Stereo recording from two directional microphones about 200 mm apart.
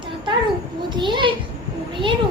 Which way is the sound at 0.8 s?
25° right (ahead or behind).